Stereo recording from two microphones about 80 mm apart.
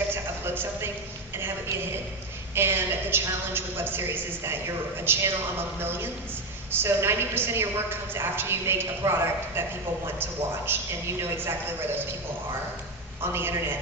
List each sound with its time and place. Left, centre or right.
0.1 s a sound: right
2.5 s a woman's voice: right
10.7 s a woman's voice: right
13.2 s a man's voice: right